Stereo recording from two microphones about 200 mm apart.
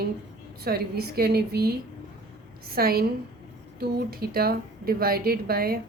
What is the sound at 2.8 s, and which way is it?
A woman's voice, 50° right (ahead or behind).